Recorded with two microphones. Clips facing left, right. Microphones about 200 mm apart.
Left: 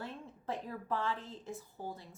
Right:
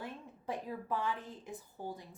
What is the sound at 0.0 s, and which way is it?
A woman's voice, 15° right (ahead or behind).